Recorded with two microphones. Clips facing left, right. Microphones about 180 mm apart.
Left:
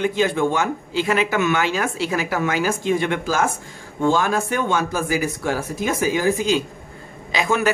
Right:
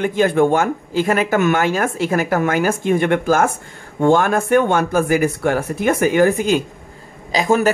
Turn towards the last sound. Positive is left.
turn(degrees=-40)  # may be behind; listen again after turning